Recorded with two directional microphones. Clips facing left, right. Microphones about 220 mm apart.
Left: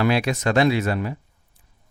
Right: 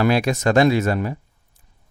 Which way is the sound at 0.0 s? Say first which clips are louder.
Right 3 dB; 45° right (ahead or behind).